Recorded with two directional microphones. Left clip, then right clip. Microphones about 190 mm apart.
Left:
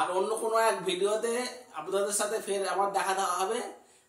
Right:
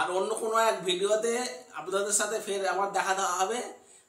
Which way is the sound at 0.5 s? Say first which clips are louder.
Right 2 dB; 20° right (ahead or behind).